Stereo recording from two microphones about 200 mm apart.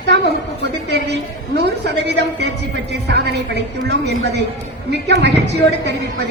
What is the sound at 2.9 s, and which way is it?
A woman's voice, 55° right (ahead or behind).